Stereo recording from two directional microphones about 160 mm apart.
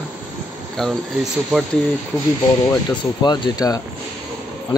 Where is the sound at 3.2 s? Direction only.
25° left (ahead or behind).